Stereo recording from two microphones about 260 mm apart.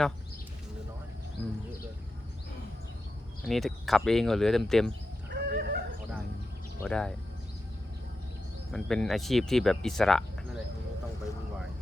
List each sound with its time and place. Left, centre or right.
3.4 s speech: centre
5.3 s fowl: right
6.7 s speech: centre
8.7 s speech: centre